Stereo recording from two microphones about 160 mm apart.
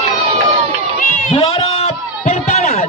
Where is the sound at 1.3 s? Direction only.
35° left (ahead or behind).